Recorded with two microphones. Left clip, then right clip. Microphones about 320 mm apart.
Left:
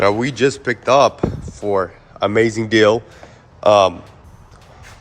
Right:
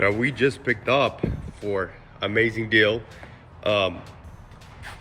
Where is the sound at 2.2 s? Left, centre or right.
Left.